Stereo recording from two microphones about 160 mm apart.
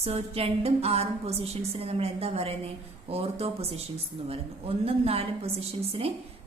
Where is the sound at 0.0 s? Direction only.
40° right (ahead or behind).